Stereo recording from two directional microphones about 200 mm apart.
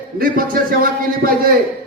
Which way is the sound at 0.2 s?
45° right (ahead or behind).